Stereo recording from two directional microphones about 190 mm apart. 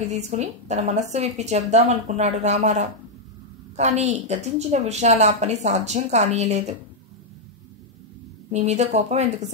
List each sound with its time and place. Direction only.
0.1 s a woman's voice: 35° right (ahead or behind)
8.5 s a woman's voice: 35° right (ahead or behind)